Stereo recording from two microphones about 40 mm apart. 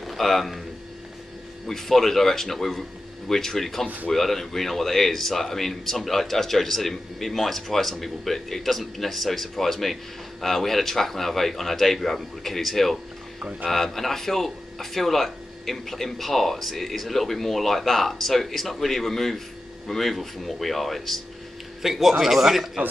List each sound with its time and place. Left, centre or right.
0.0 s a man's voice: centre
1.7 s speech: centre
13.4 s speech: right
13.7 s speech: centre
21.8 s a man's voice: centre